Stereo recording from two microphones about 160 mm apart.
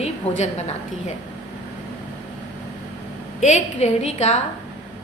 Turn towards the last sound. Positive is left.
turn(degrees=45)  # may be behind; listen again after turning